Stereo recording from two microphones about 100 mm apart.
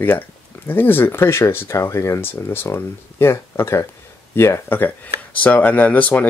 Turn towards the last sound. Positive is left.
turn(degrees=15)  # may be behind; listen again after turning